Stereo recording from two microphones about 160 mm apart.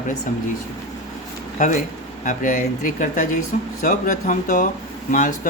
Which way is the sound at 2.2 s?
55° left (ahead or behind).